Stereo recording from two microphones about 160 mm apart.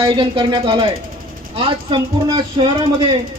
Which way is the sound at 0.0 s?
30° right (ahead or behind).